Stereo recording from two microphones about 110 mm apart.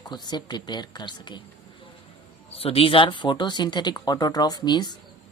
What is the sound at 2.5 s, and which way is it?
Speech, 60° left (ahead or behind).